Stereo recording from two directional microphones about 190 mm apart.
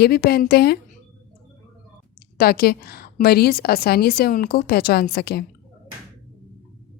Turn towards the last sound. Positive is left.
turn(degrees=55)  # may be behind; listen again after turning